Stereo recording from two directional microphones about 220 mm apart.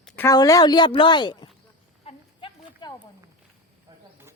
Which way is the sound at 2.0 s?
25° left (ahead or behind).